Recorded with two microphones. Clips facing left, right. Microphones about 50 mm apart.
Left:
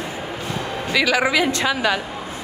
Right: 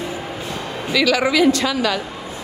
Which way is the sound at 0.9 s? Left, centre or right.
Centre.